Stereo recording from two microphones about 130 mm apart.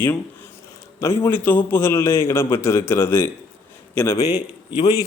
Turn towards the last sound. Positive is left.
turn(degrees=30)  # may be behind; listen again after turning